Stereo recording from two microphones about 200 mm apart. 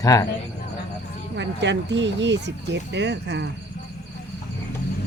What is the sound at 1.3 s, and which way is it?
Speech, 60° right (ahead or behind).